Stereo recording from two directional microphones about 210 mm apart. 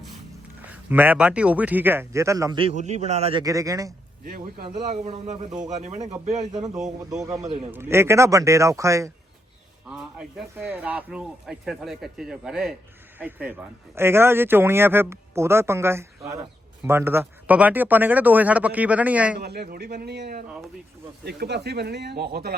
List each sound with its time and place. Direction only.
0.6 s speech: 10° right (ahead or behind); by 3.4 s 30° right (ahead or behind)
3.4 s speech: 15° right (ahead or behind)
4.2 s speech: 40° right (ahead or behind)
7.1 s speech: 15° right (ahead or behind)
7.4 s speech: 35° right (ahead or behind)
7.7 s speech: 10° right (ahead or behind)
9.9 s speech: 5° right (ahead or behind)
19.4 s speech: 50° right (ahead or behind)